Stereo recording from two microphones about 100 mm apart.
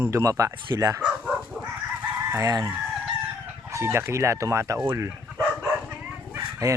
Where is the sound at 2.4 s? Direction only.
40° right (ahead or behind).